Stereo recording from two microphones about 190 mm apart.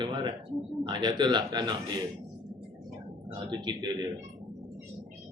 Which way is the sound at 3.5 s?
25° right (ahead or behind).